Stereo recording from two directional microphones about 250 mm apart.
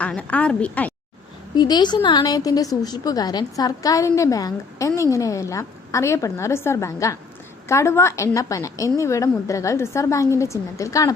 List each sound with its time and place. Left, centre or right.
0.0 s a woman's voice: centre
1.5 s a woman's voice: centre